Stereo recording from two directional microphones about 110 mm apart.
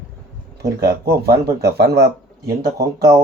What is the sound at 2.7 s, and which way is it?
Speech, 30° right (ahead or behind).